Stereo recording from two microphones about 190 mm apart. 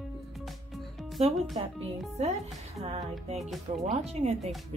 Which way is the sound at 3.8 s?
35° right (ahead or behind).